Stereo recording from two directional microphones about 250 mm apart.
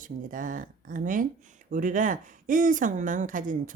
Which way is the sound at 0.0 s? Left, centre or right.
Right.